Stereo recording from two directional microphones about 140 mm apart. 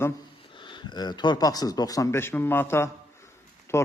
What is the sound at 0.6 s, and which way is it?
Speech, 35° left (ahead or behind).